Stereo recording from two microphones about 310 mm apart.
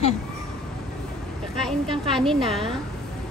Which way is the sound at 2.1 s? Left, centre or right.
Centre.